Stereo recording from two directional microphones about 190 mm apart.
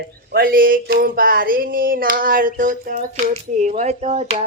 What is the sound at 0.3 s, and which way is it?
Speech, 50° right (ahead or behind).